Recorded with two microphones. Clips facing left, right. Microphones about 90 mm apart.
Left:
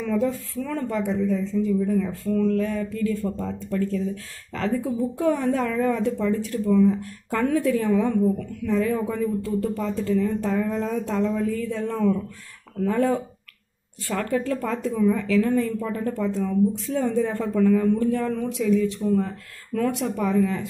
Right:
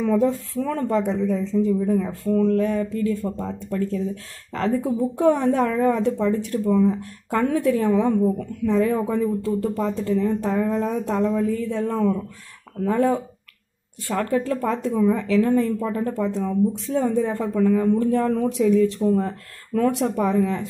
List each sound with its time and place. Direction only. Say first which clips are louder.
0.0 s speech: right 4 dB; 30° right (ahead or behind)